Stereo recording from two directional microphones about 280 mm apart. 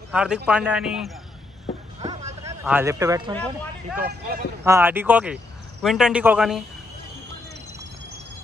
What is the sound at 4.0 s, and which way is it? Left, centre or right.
Speech, right.